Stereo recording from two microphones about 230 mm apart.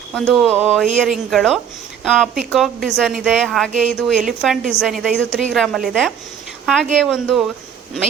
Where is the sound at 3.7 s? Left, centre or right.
Right.